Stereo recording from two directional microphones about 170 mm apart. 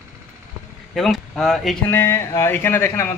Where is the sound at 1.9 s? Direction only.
15° left (ahead or behind).